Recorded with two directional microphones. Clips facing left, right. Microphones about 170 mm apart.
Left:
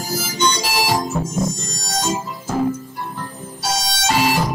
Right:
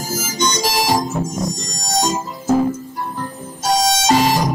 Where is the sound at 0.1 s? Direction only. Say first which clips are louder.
Even; 45° right (ahead or behind).